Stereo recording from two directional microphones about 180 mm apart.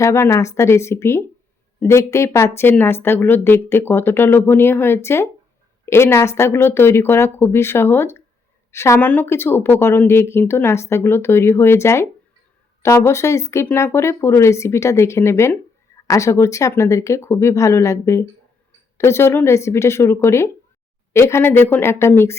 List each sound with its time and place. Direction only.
0.0 s speech: 15° left (ahead or behind)